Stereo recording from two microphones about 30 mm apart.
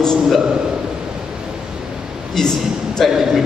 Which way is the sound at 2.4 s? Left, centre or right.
Centre.